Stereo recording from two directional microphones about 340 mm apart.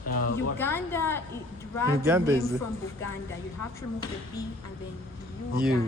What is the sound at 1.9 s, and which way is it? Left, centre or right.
Speech, centre.